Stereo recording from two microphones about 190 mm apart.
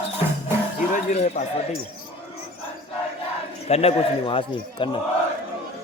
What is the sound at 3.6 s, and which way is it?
Speech, 30° left (ahead or behind).